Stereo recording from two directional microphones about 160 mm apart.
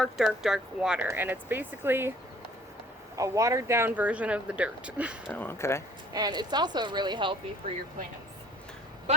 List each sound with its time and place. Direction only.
0.0 s speech: centre (ahead or behind)
3.2 s speech: 20° right (ahead or behind)
5.3 s speech: 15° left (ahead or behind)
6.1 s speech: 25° right (ahead or behind)